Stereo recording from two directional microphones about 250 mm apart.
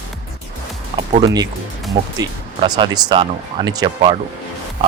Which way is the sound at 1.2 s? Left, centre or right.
Centre.